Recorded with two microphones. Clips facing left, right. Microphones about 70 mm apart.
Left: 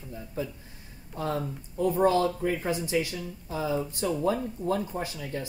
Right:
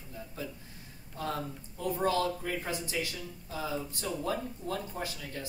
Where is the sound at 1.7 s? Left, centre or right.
Left.